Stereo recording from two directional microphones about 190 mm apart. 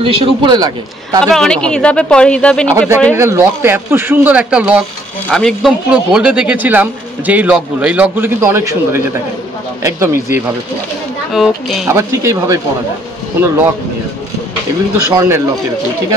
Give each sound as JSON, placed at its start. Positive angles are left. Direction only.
{"t": 0.0, "sound": "a man's voice", "side_deg": -30}
{"t": 1.2, "sound": "speech", "side_deg": 5}
{"t": 3.2, "sound": "speech", "side_deg": -15}
{"t": 11.3, "sound": "speech", "side_deg": 0}
{"t": 11.9, "sound": "speech", "side_deg": -15}
{"t": 15.0, "sound": "speech", "side_deg": -15}